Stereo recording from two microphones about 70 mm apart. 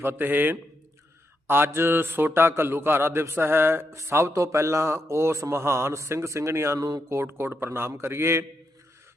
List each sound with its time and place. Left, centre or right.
0.0 s a man's voice: right
6.7 s speech: right
7.1 s a man's voice: right